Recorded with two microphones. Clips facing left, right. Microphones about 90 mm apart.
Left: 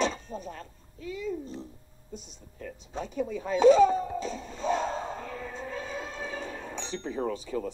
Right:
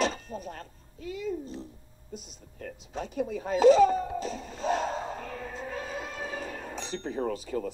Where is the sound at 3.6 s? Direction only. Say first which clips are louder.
Even; 35° left (ahead or behind).